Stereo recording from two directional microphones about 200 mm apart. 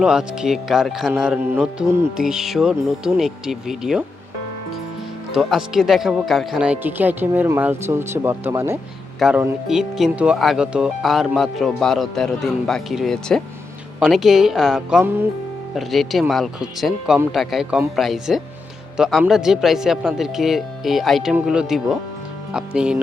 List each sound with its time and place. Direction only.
0.0 s speech: 5° right (ahead or behind)
5.3 s speech: centre (ahead or behind)